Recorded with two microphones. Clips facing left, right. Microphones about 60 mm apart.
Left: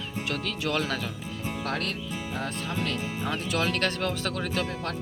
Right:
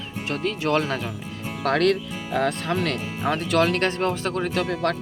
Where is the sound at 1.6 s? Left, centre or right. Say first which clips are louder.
Right 13 dB; right.